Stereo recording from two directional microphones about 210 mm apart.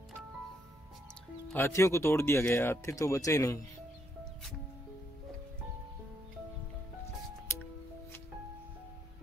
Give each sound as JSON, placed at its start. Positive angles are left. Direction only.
{"t": 1.5, "sound": "speech", "side_deg": 15}
{"t": 4.2, "sound": "music", "side_deg": 0}
{"t": 7.5, "sound": "music", "side_deg": 10}